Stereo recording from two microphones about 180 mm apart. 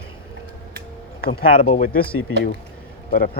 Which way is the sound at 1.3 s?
50° left (ahead or behind).